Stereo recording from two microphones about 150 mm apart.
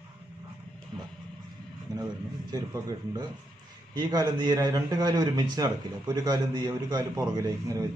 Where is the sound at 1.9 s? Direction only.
25° right (ahead or behind).